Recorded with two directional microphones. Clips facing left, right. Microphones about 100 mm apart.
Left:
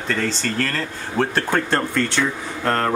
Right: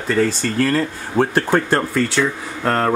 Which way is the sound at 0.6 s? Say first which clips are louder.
Right 6 dB; 15° right (ahead or behind).